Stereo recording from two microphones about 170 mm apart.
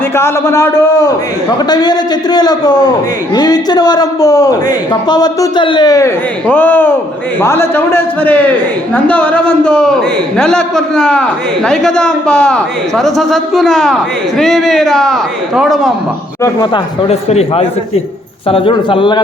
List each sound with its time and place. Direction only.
0.2 s a man's voice: 15° left (ahead or behind)
6.5 s a man's voice: 10° left (ahead or behind)
16.4 s a man's voice: 20° left (ahead or behind)
17.1 s a man's voice: 40° left (ahead or behind)